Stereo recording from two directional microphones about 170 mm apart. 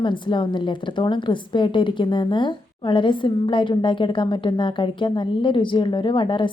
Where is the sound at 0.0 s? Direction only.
30° left (ahead or behind).